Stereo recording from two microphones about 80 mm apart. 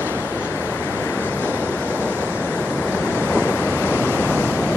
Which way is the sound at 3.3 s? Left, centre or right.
Left.